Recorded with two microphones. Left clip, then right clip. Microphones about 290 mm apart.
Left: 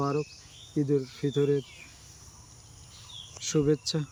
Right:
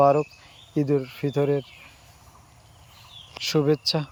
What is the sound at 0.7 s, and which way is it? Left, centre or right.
Speech, right.